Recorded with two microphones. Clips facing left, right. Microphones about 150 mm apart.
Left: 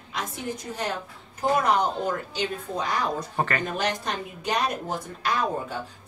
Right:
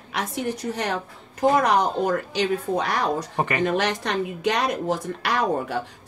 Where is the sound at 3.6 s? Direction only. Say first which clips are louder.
Right 5 dB; 80° right.